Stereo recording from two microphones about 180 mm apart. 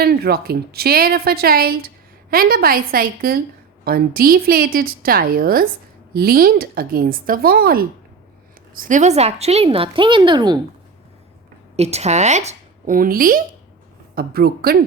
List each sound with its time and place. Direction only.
0.0 s a woman's voice: 60° right (ahead or behind); by 10.6 s 25° right (ahead or behind)
11.8 s a woman's voice: 35° right (ahead or behind); by 14.8 s 55° right (ahead or behind)